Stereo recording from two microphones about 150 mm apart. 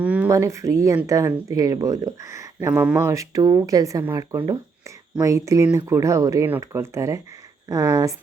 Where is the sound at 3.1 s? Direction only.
20° right (ahead or behind).